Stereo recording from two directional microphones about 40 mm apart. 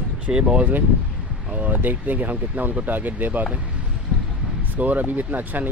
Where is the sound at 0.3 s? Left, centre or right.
Right.